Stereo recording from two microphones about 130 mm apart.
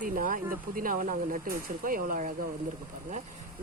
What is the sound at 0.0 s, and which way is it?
Speech, 90° right.